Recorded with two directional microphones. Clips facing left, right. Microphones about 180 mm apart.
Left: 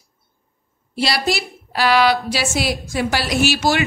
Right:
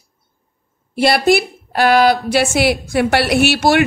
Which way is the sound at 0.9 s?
55° right (ahead or behind).